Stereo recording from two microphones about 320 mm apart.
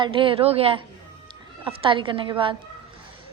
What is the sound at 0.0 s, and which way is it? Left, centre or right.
Speech, centre.